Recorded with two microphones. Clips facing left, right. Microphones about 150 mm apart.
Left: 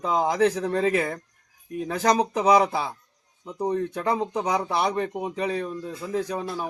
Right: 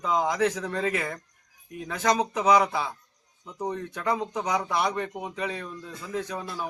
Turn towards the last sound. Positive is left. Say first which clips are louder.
# left 5 dB
turn(degrees=30)  # may be behind; listen again after turning